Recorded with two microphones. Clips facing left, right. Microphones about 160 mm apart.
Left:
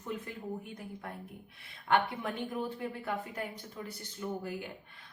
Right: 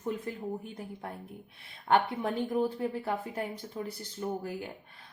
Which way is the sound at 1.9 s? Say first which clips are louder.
Right 3 dB; 35° right (ahead or behind).